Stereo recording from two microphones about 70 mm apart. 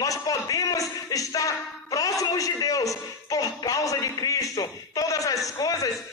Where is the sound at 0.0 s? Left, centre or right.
Left.